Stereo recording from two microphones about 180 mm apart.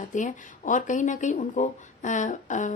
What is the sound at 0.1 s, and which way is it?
Speech, 45° left (ahead or behind).